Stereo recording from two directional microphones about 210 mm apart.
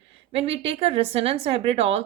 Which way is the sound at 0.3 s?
30° right (ahead or behind).